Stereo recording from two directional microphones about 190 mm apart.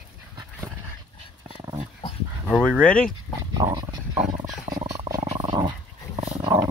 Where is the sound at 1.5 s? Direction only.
25° right (ahead or behind).